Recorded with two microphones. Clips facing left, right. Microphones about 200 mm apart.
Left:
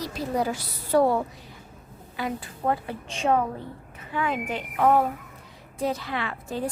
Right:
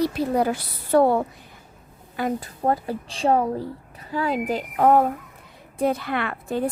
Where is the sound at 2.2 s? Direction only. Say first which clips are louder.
Right 5 dB; 45° right (ahead or behind).